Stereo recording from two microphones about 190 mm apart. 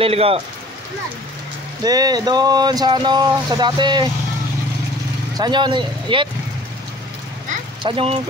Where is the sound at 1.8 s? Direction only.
20° right (ahead or behind).